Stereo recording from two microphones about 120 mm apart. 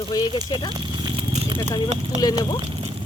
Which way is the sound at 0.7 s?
40° right (ahead or behind).